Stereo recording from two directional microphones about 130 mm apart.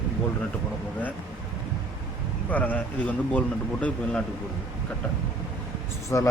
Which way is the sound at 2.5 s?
10° left (ahead or behind).